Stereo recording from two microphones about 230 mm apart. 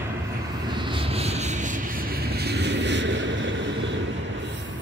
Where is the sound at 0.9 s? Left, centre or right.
Right.